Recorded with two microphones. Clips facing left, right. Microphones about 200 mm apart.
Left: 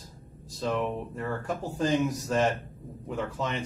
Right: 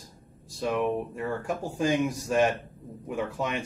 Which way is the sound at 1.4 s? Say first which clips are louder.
Right 1 dB; 10° right (ahead or behind).